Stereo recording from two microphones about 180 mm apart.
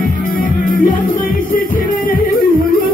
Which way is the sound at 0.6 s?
50° left (ahead or behind).